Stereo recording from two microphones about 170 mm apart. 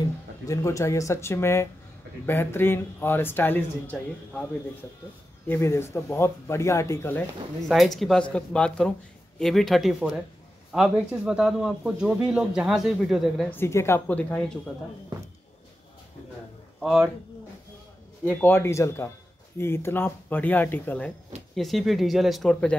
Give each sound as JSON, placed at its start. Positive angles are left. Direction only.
{"t": 0.5, "sound": "speech", "side_deg": 20}
{"t": 5.5, "sound": "speech", "side_deg": 15}
{"t": 7.6, "sound": "a man's voice", "side_deg": 0}
{"t": 13.5, "sound": "speech", "side_deg": 15}
{"t": 16.8, "sound": "a man's voice", "side_deg": 0}
{"t": 18.2, "sound": "a man's voice", "side_deg": 10}